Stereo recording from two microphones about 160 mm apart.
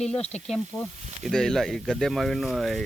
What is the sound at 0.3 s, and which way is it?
Speech, 5° left (ahead or behind).